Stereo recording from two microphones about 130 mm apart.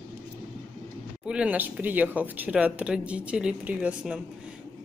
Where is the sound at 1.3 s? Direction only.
10° right (ahead or behind).